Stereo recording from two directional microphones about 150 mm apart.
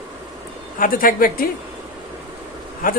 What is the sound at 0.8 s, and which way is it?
Speech, 65° left (ahead or behind).